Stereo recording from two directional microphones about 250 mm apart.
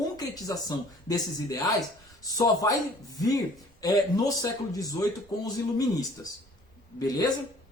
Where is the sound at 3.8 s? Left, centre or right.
Centre.